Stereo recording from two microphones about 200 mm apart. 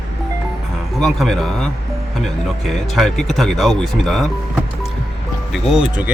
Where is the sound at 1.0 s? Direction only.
Centre (ahead or behind).